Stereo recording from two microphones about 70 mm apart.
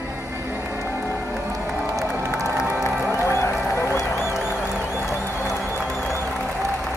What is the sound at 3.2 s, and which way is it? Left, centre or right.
Run, left.